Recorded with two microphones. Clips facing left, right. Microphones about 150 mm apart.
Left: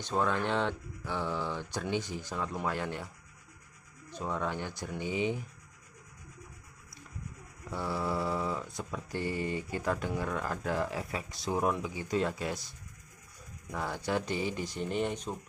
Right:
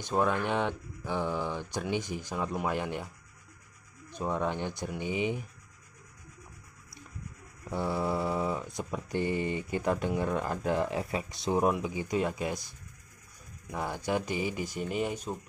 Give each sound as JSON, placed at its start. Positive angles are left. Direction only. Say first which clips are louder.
{"t": 0.0, "sound": "speech", "louder": "right 2 dB", "side_deg": -15}
{"t": 4.1, "sound": "speech", "louder": "right 3 dB", "side_deg": -15}
{"t": 7.7, "sound": "mantra", "louder": "right 3 dB", "side_deg": -20}
{"t": 11.7, "sound": "speech", "louder": "right 2 dB", "side_deg": -15}